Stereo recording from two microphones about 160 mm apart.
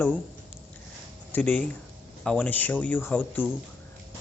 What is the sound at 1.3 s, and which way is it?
Speech, 10° left (ahead or behind).